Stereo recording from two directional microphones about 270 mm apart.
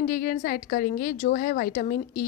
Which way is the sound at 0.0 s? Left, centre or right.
Left.